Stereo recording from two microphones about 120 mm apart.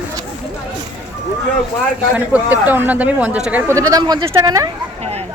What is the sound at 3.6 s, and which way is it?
Speech, 30° right (ahead or behind).